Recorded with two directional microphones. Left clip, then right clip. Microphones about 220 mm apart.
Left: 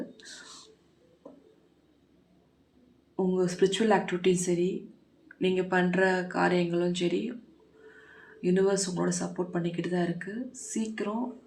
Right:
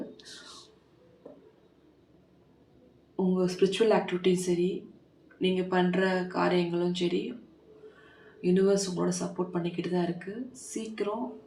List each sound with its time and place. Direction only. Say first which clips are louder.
3.3 s speech: even; 25° left (ahead or behind)
8.4 s speech: right 1 dB; 25° left (ahead or behind)